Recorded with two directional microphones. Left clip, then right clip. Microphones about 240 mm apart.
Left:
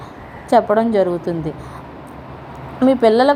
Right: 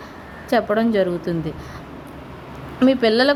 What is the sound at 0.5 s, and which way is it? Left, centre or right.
Speech, centre.